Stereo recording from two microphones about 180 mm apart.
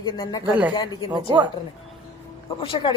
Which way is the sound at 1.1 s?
25° right (ahead or behind).